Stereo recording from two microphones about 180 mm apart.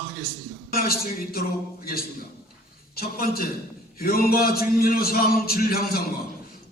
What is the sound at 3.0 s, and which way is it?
A man's voice, 55° left (ahead or behind).